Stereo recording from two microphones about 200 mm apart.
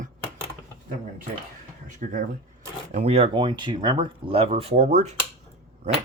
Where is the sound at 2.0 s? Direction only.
40° right (ahead or behind).